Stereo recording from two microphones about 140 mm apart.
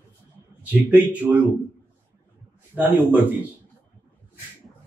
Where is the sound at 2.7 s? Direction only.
10° right (ahead or behind).